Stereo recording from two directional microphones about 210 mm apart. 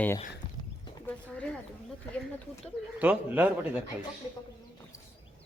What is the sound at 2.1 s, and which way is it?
Speech, 15° left (ahead or behind).